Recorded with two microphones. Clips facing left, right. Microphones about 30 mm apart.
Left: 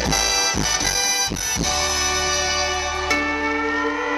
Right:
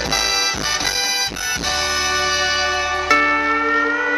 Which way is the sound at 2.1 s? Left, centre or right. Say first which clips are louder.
Right 3 dB; right.